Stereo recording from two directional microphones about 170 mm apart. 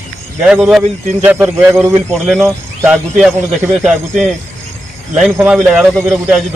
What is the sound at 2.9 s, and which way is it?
Speech, 5° right (ahead or behind).